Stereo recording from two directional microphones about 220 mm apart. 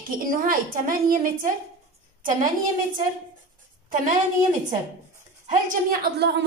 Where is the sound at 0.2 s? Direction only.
40° right (ahead or behind).